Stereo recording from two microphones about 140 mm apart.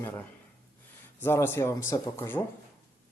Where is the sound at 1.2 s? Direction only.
15° left (ahead or behind).